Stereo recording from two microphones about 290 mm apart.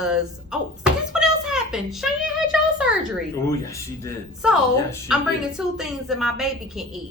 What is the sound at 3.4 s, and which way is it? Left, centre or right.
Speech, centre.